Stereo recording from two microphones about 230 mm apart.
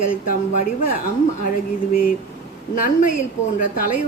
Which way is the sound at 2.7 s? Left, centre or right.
Left.